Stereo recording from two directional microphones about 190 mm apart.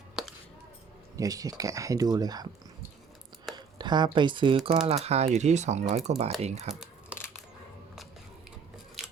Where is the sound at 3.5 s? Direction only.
25° right (ahead or behind).